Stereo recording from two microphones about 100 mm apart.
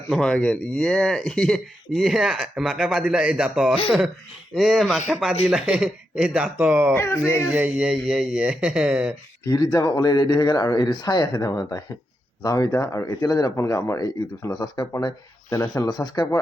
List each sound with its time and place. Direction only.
0.1 s speech: 5° left (ahead or behind); by 6.9 s 15° right (ahead or behind)
6.9 s speech: 25° left (ahead or behind)
7.5 s speech: 10° right (ahead or behind)
9.4 s speech: 35° left (ahead or behind)
15.4 s speech: 35° left (ahead or behind)